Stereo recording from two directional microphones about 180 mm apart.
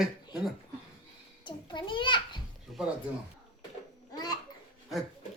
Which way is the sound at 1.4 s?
25° left (ahead or behind).